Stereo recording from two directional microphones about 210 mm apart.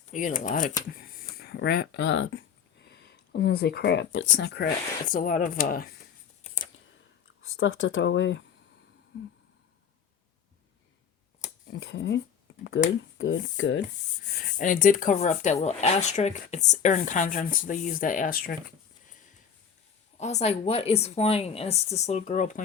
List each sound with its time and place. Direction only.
0.1 s speech: 40° left (ahead or behind)
7.4 s speech: 70° left (ahead or behind)
11.8 s speech: 60° left (ahead or behind)
12.5 s finger snapping: 70° left (ahead or behind)
13.1 s speech: 65° left (ahead or behind)
14.3 s speech: 40° left (ahead or behind)
20.1 s speech: 30° left (ahead or behind)